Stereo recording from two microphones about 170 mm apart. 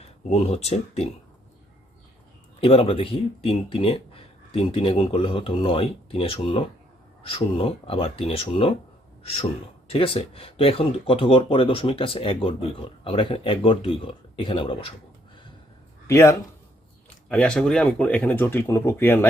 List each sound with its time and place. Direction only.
0.3 s speech: 40° left (ahead or behind)
2.6 s speech: 35° left (ahead or behind)
9.9 s speech: 35° left (ahead or behind)
16.0 s speech: 15° left (ahead or behind)
17.2 s speech: 5° left (ahead or behind)